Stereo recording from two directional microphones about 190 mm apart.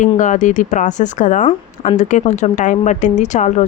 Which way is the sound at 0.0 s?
40° left (ahead or behind).